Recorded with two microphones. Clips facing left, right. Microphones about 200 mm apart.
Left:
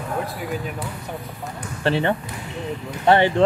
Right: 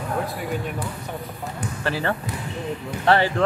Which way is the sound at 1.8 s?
25° left (ahead or behind).